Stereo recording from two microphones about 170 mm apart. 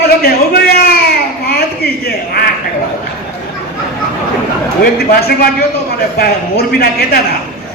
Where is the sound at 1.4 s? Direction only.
65° left (ahead or behind).